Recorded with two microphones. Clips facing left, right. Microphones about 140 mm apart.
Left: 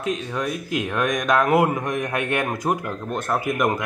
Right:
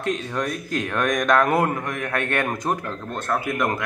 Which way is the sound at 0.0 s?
5° left (ahead or behind).